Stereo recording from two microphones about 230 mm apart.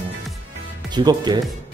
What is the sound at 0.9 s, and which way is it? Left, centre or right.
Speech, centre.